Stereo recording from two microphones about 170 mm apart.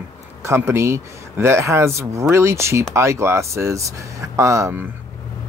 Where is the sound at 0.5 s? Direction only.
15° right (ahead or behind).